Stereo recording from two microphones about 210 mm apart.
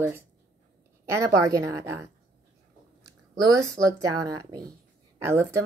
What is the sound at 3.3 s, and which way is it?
Speech, 15° right (ahead or behind).